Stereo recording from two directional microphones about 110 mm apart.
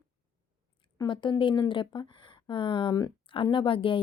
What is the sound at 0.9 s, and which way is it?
Speech, 45° left (ahead or behind).